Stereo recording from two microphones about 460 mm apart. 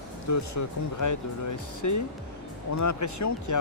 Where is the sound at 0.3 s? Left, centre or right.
Left.